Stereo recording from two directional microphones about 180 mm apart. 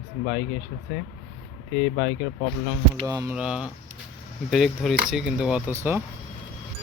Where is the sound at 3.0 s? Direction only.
20° right (ahead or behind).